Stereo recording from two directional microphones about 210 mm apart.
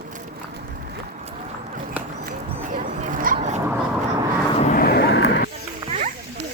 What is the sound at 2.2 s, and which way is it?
Dog, 40° right (ahead or behind).